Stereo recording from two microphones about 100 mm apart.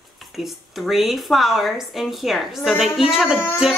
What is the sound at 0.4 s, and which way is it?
Speech, centre (ahead or behind).